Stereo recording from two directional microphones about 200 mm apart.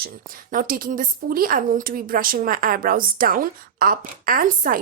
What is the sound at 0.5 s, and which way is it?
A woman's voice, 45° right (ahead or behind).